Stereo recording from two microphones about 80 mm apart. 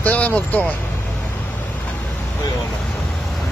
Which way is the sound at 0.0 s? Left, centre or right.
Centre.